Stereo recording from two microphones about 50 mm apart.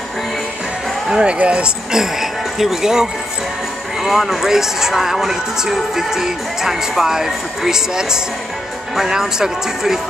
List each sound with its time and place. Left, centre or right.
1.2 s speech: right
2.0 s speech: centre